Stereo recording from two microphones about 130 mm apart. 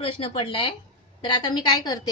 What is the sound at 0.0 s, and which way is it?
A woman's voice, 45° left (ahead or behind).